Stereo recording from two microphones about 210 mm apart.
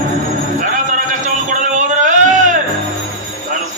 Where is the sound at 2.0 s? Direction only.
35° right (ahead or behind).